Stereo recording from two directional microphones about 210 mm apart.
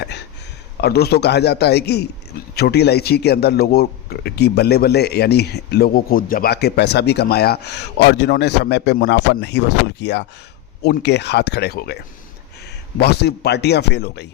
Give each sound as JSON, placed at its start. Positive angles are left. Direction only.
{"t": 0.8, "sound": "a man's voice", "side_deg": 50}